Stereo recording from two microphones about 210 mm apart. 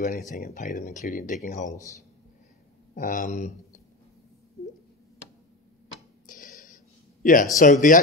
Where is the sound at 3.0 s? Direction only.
40° left (ahead or behind).